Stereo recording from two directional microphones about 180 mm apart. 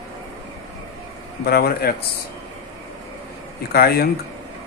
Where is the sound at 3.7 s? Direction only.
60° left (ahead or behind).